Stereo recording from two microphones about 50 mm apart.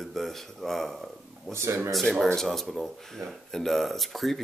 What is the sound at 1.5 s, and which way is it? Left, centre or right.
Speech, right.